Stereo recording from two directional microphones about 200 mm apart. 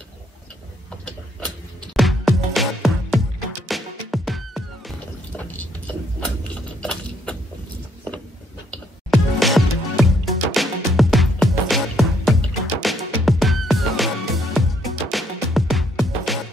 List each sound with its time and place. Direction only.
2.0 s music: centre (ahead or behind)
6.8 s a sound: 5° left (ahead or behind)
9.1 s music: centre (ahead or behind)